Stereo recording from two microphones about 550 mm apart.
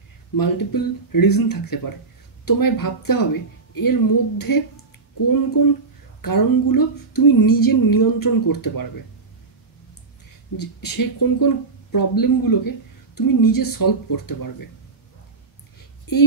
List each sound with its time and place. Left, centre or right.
0.4 s speech: left
6.2 s speech: left
10.6 s speech: left
16.1 s speech: left